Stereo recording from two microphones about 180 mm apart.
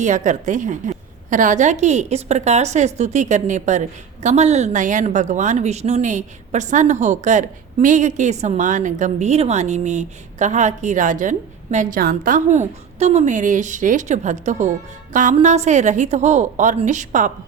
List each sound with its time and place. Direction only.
0.0 s a woman's voice: 45° right (ahead or behind)